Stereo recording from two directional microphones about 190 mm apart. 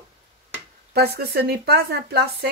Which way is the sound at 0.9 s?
55° right (ahead or behind).